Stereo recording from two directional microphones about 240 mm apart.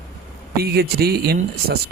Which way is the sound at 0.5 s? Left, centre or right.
Right.